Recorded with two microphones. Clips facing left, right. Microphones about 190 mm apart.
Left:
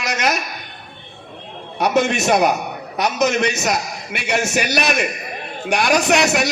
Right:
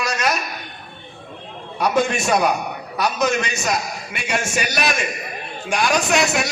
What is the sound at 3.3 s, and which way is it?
Speech, 75° left (ahead or behind).